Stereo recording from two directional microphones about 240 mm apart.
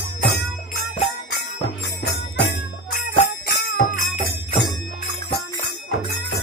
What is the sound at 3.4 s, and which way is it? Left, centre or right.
Jingle bell, left.